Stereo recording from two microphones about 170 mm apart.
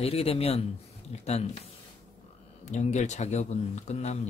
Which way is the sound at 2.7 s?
45° left (ahead or behind).